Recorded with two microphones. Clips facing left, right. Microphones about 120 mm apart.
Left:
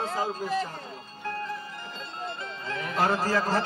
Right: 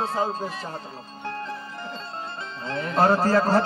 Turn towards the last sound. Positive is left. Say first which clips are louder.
# right 6 dB
turn(degrees=-30)  # may be behind; listen again after turning